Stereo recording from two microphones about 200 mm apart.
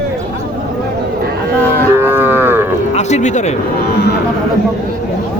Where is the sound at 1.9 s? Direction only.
10° right (ahead or behind).